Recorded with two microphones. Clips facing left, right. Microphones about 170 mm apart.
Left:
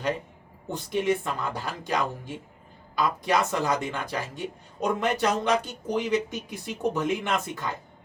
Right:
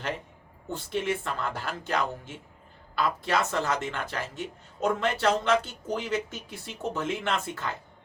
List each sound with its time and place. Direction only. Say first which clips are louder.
0.7 s speech: left 4 dB; 15° left (ahead or behind)